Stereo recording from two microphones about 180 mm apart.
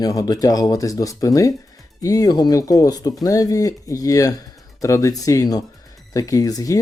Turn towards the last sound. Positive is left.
turn(degrees=20)  # may be behind; listen again after turning